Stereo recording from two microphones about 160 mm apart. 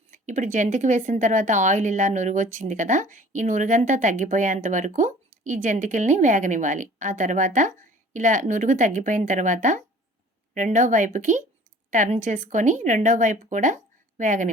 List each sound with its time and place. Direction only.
0.1 s speech: 50° right (ahead or behind)